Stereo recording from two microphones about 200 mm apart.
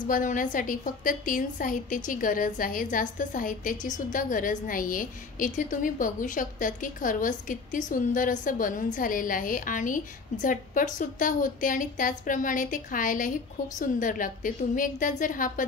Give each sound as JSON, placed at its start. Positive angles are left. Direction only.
{"t": 0.0, "sound": "a woman's voice", "side_deg": 40}